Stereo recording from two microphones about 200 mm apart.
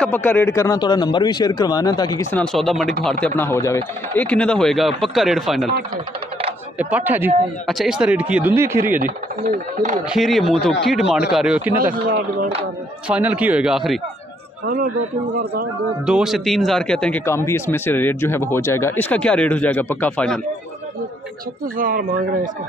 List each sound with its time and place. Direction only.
0.0 s speech: 10° left (ahead or behind)
2.3 s speech: centre (ahead or behind)
6.8 s speech: 10° right (ahead or behind)
8.9 s speech: 45° right (ahead or behind)
10.0 s speech: centre (ahead or behind)
13.1 s speech: 5° right (ahead or behind)
15.3 s speech: 50° right (ahead or behind)
16.1 s speech: centre (ahead or behind)
21.7 s speech: 45° right (ahead or behind)